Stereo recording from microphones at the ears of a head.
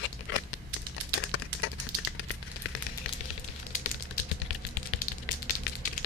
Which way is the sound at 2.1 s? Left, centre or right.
Left.